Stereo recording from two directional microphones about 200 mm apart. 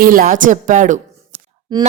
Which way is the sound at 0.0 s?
45° right (ahead or behind).